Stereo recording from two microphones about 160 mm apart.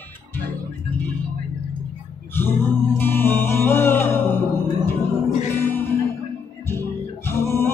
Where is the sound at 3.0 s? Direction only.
15° left (ahead or behind).